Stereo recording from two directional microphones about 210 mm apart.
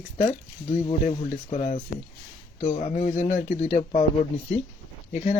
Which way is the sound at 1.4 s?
30° left (ahead or behind).